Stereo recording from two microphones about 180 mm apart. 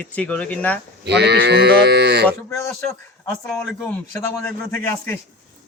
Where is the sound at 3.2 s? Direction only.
5° left (ahead or behind).